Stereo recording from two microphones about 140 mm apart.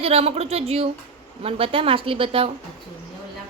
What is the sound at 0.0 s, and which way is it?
A woman's voice, 45° right (ahead or behind).